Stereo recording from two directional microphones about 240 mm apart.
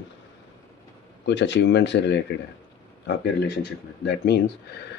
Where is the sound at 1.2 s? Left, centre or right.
Left.